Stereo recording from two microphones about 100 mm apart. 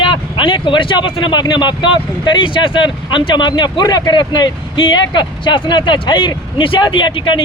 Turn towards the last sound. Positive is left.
turn(degrees=55)  # may be behind; listen again after turning